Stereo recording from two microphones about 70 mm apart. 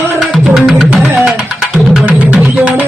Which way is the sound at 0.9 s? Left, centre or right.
Right.